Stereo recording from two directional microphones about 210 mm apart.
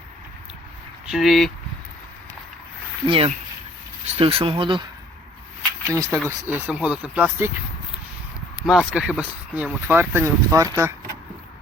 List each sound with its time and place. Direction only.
1.1 s speech: centre (ahead or behind)
3.1 s speech: 25° right (ahead or behind)
5.9 s speech: 15° right (ahead or behind)
8.6 s speech: centre (ahead or behind)